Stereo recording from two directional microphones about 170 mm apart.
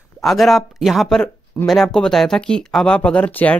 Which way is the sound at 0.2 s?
Centre (ahead or behind).